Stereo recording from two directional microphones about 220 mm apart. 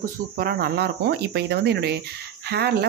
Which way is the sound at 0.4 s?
45° right (ahead or behind).